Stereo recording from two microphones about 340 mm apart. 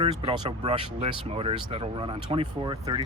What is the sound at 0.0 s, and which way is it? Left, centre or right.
Speech, centre.